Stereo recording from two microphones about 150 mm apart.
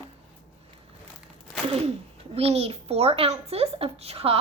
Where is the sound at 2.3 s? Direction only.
40° right (ahead or behind).